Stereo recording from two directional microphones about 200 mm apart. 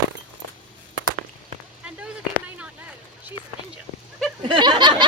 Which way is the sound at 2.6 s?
5° right (ahead or behind).